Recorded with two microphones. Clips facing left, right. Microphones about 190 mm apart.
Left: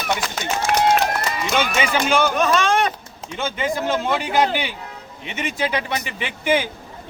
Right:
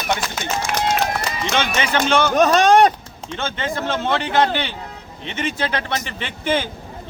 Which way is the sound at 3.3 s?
10° left (ahead or behind).